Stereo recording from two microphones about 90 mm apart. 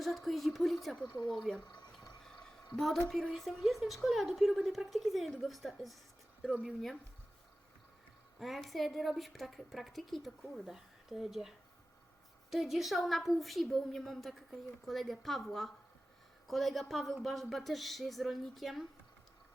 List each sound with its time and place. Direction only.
0.0 s a woman's voice: centre (ahead or behind)
1.6 s speech: 55° left (ahead or behind)
1.9 s a sound: 5° left (ahead or behind)
2.7 s a woman's voice: centre (ahead or behind)
8.4 s a woman's voice: centre (ahead or behind)